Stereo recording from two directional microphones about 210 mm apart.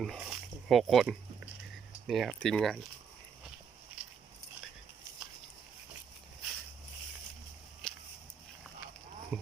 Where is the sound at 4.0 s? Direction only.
5° right (ahead or behind).